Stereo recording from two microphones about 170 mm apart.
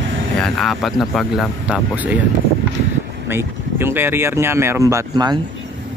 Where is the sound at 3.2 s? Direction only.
15° right (ahead or behind).